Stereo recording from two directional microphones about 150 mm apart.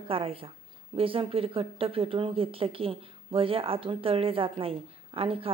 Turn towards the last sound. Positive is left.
turn(degrees=-40)  # may be behind; listen again after turning